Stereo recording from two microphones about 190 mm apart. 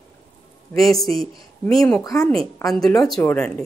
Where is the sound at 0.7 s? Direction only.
Centre (ahead or behind).